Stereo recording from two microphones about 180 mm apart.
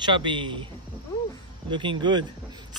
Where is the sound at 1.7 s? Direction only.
25° right (ahead or behind).